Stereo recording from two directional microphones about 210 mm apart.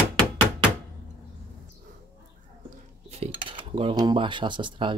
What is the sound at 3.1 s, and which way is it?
Speech, 30° right (ahead or behind).